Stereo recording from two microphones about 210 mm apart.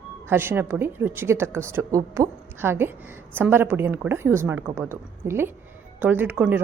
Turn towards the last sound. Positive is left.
turn(degrees=-10)  # may be behind; listen again after turning